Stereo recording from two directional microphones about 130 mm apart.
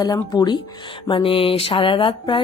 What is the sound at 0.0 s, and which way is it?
Speech, 30° left (ahead or behind).